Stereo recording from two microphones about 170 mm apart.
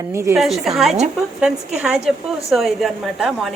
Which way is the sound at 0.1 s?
15° right (ahead or behind).